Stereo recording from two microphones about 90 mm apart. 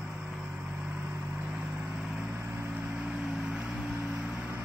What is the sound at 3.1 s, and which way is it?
Music, 5° right (ahead or behind).